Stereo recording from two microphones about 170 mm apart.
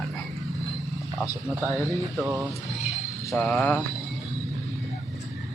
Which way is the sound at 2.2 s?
15° right (ahead or behind).